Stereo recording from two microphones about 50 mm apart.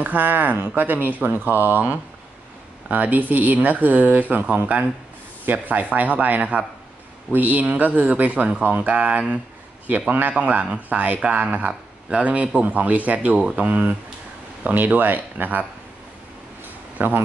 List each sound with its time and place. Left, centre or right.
0.0 s speech: right
8.6 s speech: right
8.9 s a man's voice: right
17.0 s speech: right